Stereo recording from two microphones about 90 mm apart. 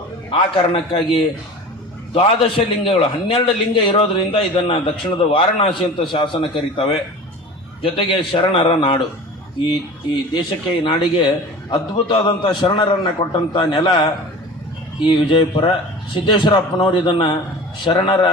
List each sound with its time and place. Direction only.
0.3 s a man's voice: 80° left
10.8 s a man's voice: 60° left (ahead or behind); by 15.7 s 75° left (ahead or behind)
16.2 s a man's voice: 65° left (ahead or behind)